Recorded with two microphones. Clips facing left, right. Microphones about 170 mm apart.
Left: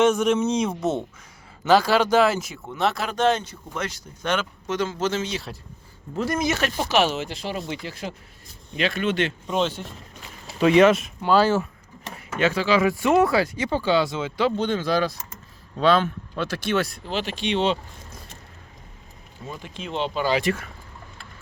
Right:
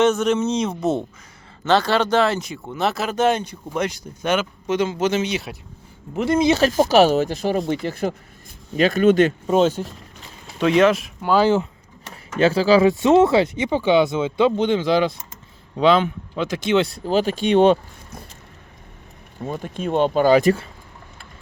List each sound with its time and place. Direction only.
0.0 s speech: 10° left (ahead or behind); by 6.7 s 25° right (ahead or behind)
6.7 s speech: 40° right (ahead or behind)
10.6 s speech: centre (ahead or behind); by 11.7 s 20° right (ahead or behind)
12.4 s speech: 30° right (ahead or behind)
16.9 s speech: 40° right (ahead or behind)
19.4 s speech: 50° right (ahead or behind)